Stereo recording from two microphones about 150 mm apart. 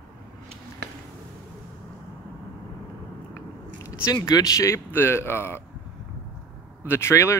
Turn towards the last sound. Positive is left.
turn(degrees=15)  # may be behind; listen again after turning